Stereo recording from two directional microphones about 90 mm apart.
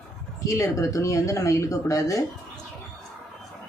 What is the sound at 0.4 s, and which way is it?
Speech, 35° left (ahead or behind).